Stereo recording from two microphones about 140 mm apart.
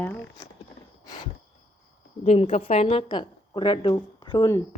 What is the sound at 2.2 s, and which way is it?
Speech, 45° left (ahead or behind).